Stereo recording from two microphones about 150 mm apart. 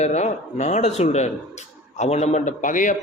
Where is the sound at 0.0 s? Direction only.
50° left (ahead or behind).